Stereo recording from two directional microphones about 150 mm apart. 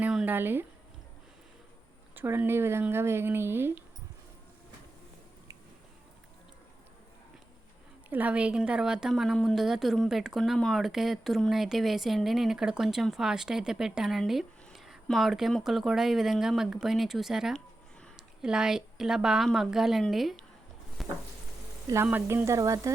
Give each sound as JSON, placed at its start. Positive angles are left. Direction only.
{"t": 0.0, "sound": "a sound", "side_deg": -5}
{"t": 0.3, "sound": "speech", "side_deg": -15}
{"t": 2.1, "sound": "speech", "side_deg": -15}
{"t": 8.1, "sound": "a woman's voice", "side_deg": -10}
{"t": 21.0, "sound": "sizzle", "side_deg": 0}
{"t": 22.0, "sound": "speech", "side_deg": -10}